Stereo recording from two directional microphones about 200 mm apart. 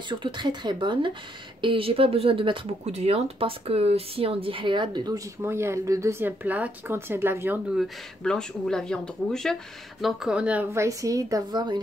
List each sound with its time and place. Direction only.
0.1 s a woman's voice: 20° right (ahead or behind)